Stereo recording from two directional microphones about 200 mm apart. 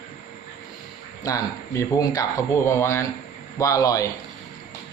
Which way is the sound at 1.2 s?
15° left (ahead or behind).